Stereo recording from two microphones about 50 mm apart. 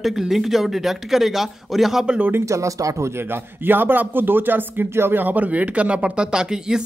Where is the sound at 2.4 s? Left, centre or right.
Right.